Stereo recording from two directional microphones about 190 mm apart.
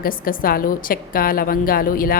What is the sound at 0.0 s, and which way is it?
A woman's voice, 50° left (ahead or behind).